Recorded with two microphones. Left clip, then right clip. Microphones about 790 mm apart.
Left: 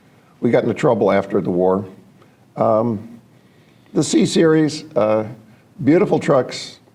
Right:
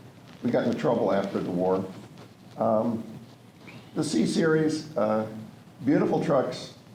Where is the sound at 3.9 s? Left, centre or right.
Left.